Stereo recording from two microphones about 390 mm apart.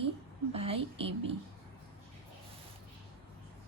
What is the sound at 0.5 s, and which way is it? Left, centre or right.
Speech, centre.